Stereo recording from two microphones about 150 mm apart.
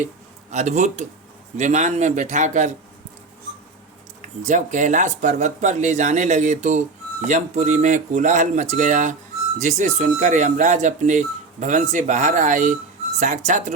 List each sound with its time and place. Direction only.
0.5 s speech: 50° right (ahead or behind)
4.4 s speech: 55° right (ahead or behind)